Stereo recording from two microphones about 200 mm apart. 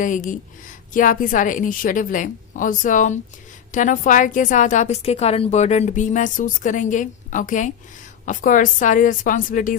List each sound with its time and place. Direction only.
0.0 s a woman's voice: 40° left (ahead or behind)